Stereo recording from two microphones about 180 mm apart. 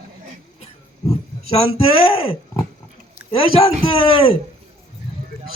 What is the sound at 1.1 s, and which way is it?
Speech, 35° left (ahead or behind).